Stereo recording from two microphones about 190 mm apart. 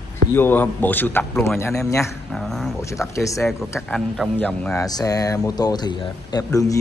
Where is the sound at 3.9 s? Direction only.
5° left (ahead or behind).